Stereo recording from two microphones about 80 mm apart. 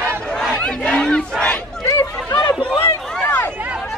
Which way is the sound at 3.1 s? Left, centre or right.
Centre.